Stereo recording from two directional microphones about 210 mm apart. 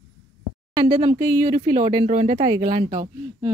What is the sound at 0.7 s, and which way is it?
Speech, 20° right (ahead or behind).